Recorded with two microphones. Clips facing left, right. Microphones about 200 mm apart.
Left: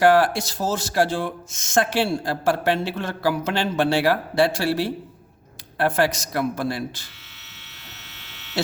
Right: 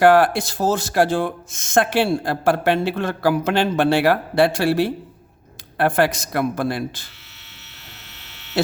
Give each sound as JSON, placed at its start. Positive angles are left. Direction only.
{"t": 0.0, "sound": "speech", "side_deg": -55}
{"t": 8.6, "sound": "speech", "side_deg": -55}